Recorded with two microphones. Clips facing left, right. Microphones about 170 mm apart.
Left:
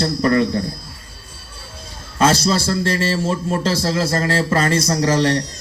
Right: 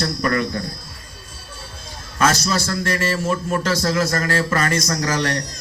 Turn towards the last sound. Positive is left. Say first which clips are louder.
# left 5 dB
turn(degrees=30)  # may be behind; listen again after turning